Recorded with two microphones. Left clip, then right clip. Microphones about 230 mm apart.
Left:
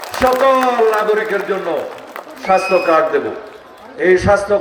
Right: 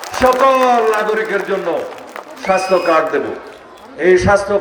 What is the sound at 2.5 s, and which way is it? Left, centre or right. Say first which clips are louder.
A man's voice: left 1 dB; right.